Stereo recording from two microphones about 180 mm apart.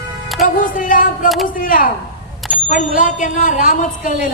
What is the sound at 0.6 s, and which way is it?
A woman's voice, 50° left (ahead or behind).